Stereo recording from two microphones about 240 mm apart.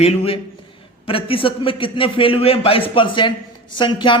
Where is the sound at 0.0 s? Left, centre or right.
Left.